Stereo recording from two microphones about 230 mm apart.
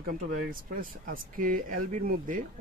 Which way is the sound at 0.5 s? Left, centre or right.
Right.